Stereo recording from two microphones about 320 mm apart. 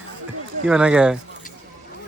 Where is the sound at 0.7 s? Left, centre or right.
Centre.